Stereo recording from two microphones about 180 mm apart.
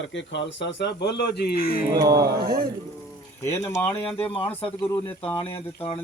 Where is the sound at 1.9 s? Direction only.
20° right (ahead or behind).